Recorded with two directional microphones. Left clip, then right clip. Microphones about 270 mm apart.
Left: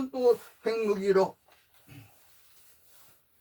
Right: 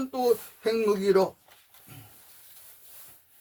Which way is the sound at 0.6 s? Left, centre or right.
Right.